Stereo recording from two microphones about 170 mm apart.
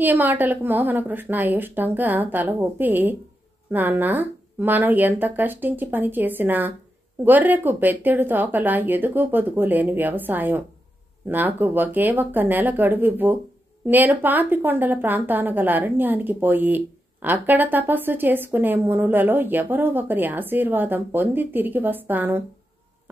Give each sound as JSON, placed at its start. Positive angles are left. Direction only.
{"t": 0.0, "sound": "a woman's voice", "side_deg": -10}